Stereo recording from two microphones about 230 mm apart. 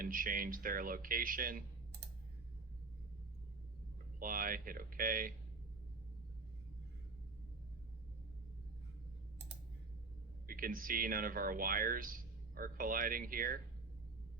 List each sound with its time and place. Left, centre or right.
0.0 s speech: right
4.2 s speech: right
10.4 s speech: right